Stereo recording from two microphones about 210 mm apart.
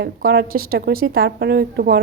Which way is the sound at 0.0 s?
45° right (ahead or behind).